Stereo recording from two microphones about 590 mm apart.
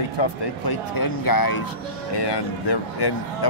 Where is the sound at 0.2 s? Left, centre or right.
Left.